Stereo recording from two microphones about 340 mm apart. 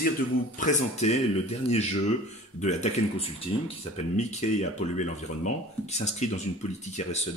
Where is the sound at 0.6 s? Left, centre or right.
Left.